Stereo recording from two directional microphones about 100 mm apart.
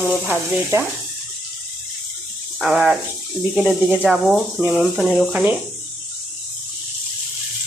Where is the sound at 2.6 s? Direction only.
5° right (ahead or behind).